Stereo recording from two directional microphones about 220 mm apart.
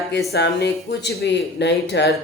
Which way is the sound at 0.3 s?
50° left (ahead or behind).